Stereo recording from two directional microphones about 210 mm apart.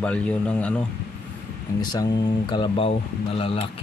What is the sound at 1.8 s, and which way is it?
Speech, 20° left (ahead or behind).